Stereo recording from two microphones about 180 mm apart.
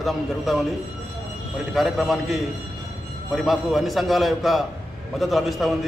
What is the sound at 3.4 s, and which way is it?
A man's voice, centre (ahead or behind).